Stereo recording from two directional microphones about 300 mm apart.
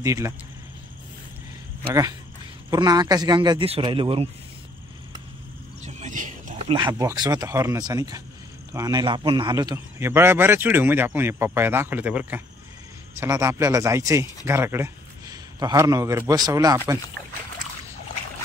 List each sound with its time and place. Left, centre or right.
0.0 s speech: centre
2.7 s speech: centre
5.8 s speech: right